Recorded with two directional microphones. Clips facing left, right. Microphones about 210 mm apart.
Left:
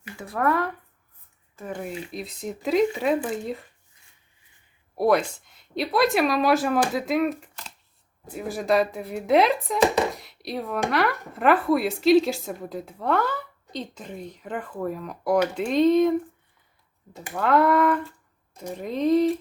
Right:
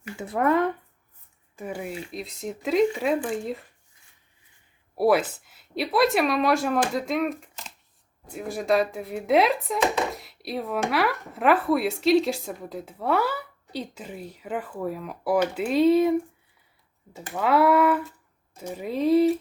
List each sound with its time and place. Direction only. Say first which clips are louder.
0.2 s speech: right 2 dB; 20° right (ahead or behind)
1.5 s speech: even; 10° right (ahead or behind)
4.9 s speech: even; 5° right (ahead or behind)
17.3 s speech: even; 5° right (ahead or behind)